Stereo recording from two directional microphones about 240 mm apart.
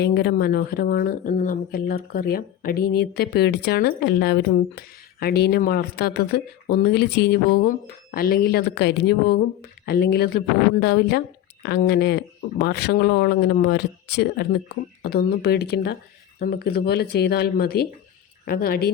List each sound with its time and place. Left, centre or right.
0.0 s speech: left